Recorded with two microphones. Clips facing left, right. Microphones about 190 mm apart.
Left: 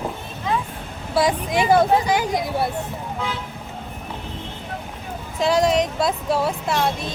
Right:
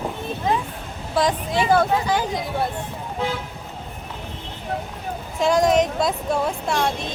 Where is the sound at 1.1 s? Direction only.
10° left (ahead or behind).